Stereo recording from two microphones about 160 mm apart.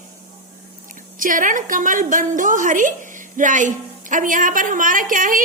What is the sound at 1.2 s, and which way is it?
A woman's voice, 55° right (ahead or behind).